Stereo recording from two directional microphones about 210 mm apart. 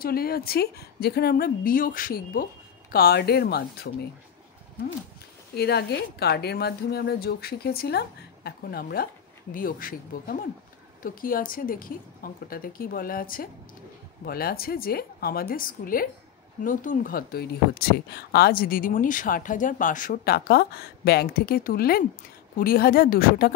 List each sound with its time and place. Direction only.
0.0 s speech: 45° left (ahead or behind)
5.5 s speech: 50° left (ahead or behind)